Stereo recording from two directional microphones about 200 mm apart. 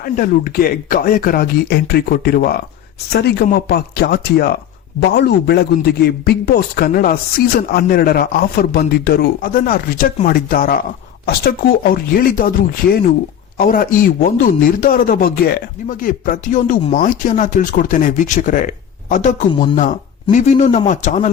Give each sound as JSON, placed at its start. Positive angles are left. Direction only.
{"t": 0.0, "sound": "a man's voice", "side_deg": 45}